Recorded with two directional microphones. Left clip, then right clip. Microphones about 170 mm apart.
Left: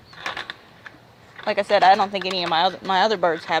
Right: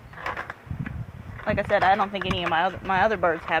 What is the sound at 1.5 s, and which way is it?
Speech, 35° left (ahead or behind).